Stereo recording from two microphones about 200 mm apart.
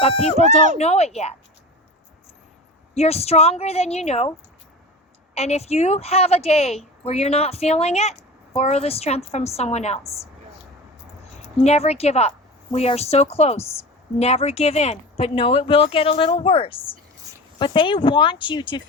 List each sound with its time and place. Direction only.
0.0 s a woman's voice: 30° left (ahead or behind)
2.9 s a woman's voice: 30° left (ahead or behind)
5.3 s a woman's voice: 30° left (ahead or behind)
11.6 s a woman's voice: 30° left (ahead or behind)